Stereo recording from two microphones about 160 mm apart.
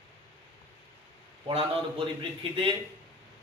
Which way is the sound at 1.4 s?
35° right (ahead or behind).